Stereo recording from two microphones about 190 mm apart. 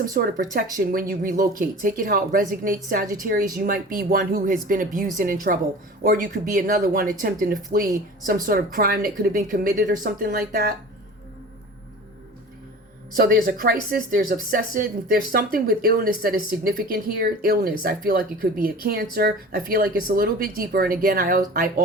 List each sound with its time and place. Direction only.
0.0 s speech: 45° right (ahead or behind)
13.1 s speech: 50° right (ahead or behind)